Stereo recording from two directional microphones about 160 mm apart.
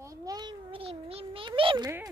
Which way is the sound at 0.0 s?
20° right (ahead or behind).